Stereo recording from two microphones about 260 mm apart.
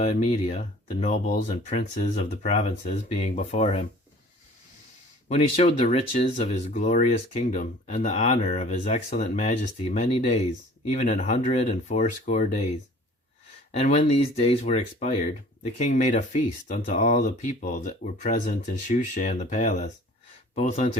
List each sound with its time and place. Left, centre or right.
0.0 s speech: left
5.3 s speech: left
13.7 s speech: left